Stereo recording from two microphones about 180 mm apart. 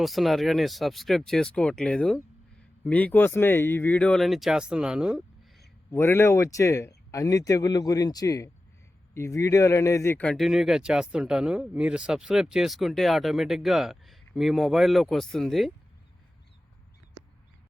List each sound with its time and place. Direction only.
0.0 s speech: centre (ahead or behind)
5.9 s speech: 15° left (ahead or behind)